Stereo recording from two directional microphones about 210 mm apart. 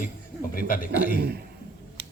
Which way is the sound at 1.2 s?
50° right (ahead or behind).